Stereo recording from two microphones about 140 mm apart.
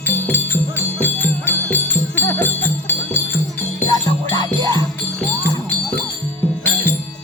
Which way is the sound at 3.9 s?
30° left (ahead or behind).